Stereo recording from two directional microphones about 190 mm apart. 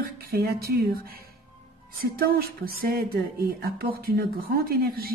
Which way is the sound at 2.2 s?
55° right (ahead or behind).